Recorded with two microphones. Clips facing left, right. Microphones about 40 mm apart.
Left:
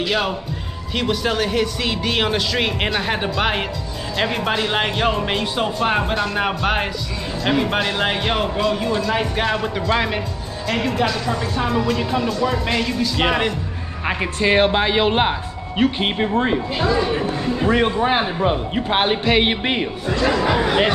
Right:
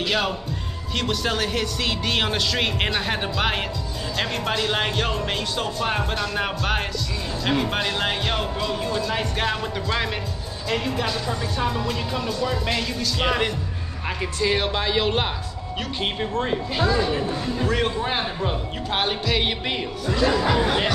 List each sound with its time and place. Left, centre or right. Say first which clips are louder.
0.0 s speech: left 3 dB; centre
11.5 s speech: left 6 dB; centre
12.3 s speech: left 4 dB; centre
14.0 s speech: left 5 dB; left